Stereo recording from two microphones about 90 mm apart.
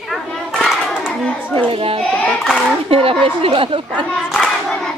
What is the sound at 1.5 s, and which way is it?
Child singing, 90° right.